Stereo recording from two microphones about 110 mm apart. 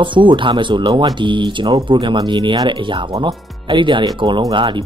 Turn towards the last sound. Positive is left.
turn(degrees=-45)  # may be behind; listen again after turning